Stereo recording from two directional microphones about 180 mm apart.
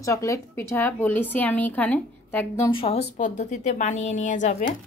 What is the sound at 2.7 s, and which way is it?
A woman's voice, 30° left (ahead or behind).